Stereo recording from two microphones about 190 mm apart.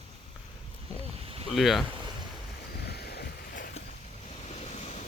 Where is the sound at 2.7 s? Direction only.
55° left (ahead or behind).